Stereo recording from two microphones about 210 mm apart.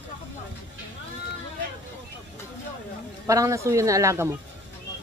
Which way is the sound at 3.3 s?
15° right (ahead or behind).